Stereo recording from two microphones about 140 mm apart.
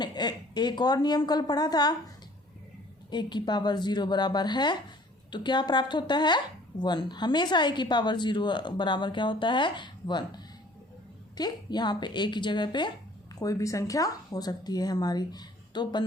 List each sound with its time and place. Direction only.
0.0 s a woman's voice: 30° left (ahead or behind)
3.1 s a woman's voice: 30° left (ahead or behind)